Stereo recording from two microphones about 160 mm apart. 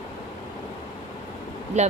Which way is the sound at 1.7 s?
45° right (ahead or behind).